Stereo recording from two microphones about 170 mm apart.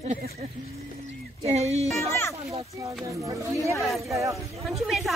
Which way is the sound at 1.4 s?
40° right (ahead or behind).